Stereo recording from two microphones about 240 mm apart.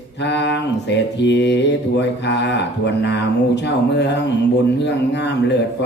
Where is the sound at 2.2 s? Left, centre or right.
Left.